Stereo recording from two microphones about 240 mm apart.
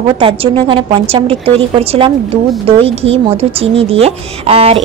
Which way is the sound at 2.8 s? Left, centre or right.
Right.